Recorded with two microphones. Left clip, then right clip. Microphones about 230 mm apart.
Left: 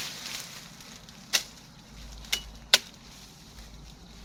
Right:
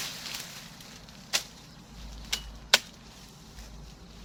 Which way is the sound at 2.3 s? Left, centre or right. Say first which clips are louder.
Left 3 dB; left.